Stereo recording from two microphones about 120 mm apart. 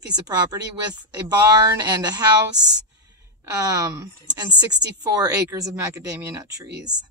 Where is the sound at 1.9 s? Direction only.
35° right (ahead or behind).